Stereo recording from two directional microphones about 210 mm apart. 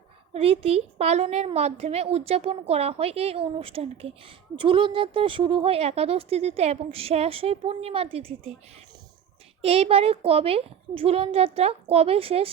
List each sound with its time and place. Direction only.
0.3 s speech: 25° right (ahead or behind)
9.6 s speech: 30° right (ahead or behind)